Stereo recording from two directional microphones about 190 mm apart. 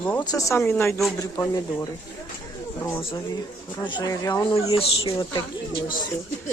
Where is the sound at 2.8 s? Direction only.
15° left (ahead or behind).